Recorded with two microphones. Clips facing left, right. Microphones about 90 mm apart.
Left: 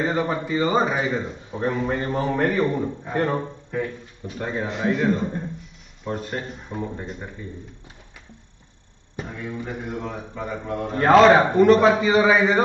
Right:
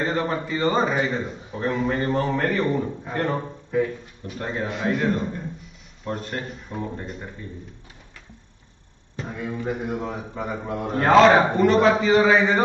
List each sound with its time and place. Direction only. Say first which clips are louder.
0.0 s a man's voice: left 1 dB; 10° left (ahead or behind)
9.7 s a man's voice: right 3 dB; 15° right (ahead or behind)
10.9 s a man's voice: left 1 dB; centre (ahead or behind)